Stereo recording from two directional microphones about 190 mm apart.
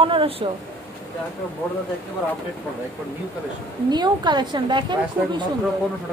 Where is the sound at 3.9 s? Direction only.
25° right (ahead or behind).